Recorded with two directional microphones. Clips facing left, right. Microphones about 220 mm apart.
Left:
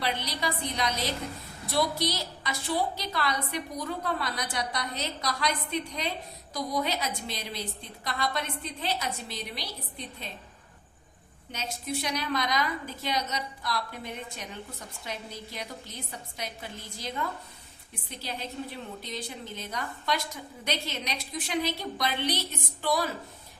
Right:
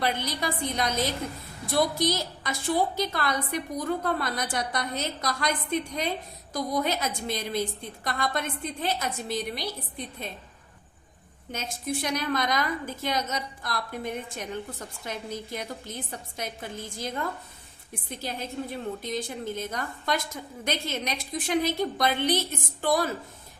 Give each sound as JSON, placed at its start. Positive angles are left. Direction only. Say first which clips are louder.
{"t": 0.0, "sound": "a woman's voice", "louder": "right 3 dB", "side_deg": -50}
{"t": 11.5, "sound": "a woman's voice", "louder": "right 2 dB", "side_deg": -50}